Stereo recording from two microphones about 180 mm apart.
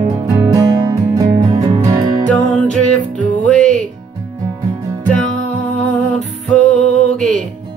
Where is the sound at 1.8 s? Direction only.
20° right (ahead or behind).